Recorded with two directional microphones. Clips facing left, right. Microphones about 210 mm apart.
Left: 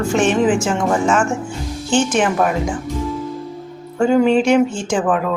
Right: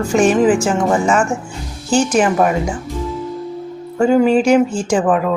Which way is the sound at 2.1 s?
5° right (ahead or behind).